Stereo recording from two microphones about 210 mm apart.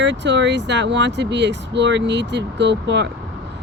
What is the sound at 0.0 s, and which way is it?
Speech, 55° right (ahead or behind).